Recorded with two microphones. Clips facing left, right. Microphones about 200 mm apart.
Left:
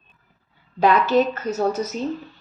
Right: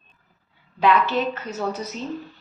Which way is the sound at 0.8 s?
40° left (ahead or behind).